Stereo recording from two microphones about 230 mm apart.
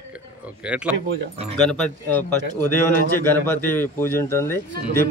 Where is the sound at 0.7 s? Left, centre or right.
Centre.